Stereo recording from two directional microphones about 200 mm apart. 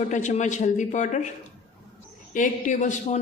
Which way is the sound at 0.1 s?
35° left (ahead or behind).